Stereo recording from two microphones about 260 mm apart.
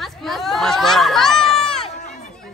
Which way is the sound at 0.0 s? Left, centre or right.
Centre.